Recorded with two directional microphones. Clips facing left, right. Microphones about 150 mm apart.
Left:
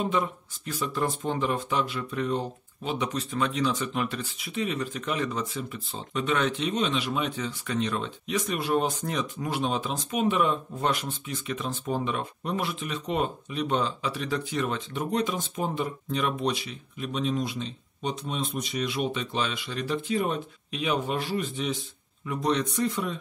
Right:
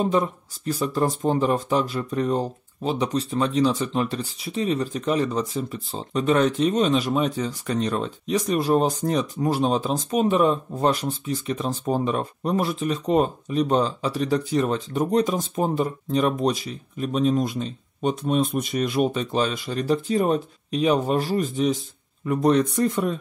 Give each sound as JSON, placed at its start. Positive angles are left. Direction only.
{"t": 0.0, "sound": "speech", "side_deg": -35}